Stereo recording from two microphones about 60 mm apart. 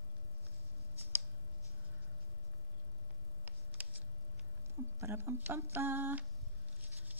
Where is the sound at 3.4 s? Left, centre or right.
Right.